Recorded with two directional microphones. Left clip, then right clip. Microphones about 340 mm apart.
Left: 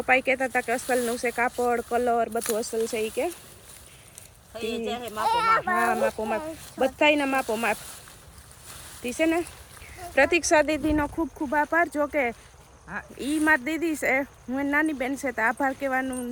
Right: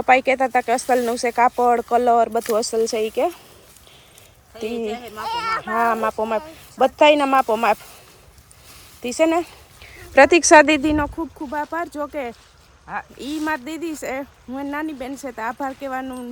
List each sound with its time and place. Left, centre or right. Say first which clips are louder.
0.0 s speech: right 7 dB; centre
4.9 s speech: right 2 dB; centre
5.2 s speech: left 2 dB; centre
5.6 s speech: right 4 dB; centre
9.0 s speech: right 6 dB; centre